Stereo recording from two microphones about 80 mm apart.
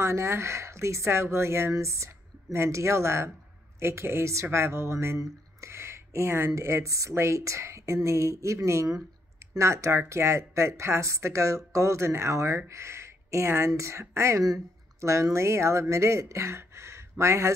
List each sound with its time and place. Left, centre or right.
0.0 s speech: right